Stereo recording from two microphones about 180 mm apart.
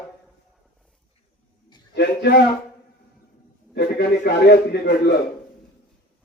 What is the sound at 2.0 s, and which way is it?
Speech, 65° left (ahead or behind).